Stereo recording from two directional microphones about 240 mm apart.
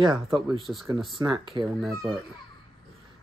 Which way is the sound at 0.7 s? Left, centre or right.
Centre.